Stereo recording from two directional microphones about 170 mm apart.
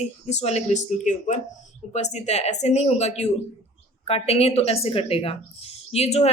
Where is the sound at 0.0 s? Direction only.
40° left (ahead or behind).